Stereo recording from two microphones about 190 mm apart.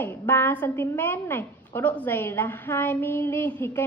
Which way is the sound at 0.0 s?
10° left (ahead or behind).